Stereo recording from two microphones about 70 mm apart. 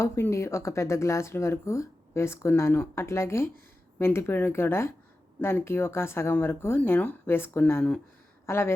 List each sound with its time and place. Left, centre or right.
0.0 s speech: left
8.4 s speech: left